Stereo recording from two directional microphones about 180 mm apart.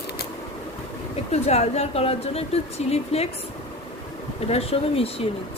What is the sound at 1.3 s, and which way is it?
Speech, 35° left (ahead or behind).